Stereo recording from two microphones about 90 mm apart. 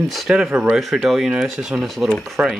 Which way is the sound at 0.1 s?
Centre (ahead or behind).